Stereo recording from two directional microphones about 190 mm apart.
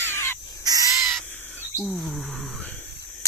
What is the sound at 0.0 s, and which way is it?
Crow, 10° left (ahead or behind).